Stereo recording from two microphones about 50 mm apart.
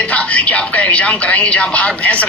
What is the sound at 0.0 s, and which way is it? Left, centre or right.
A man's voice, left.